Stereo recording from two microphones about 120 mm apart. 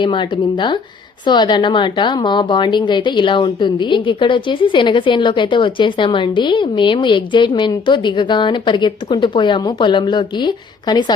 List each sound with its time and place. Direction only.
0.0 s a woman's voice: 40° left (ahead or behind)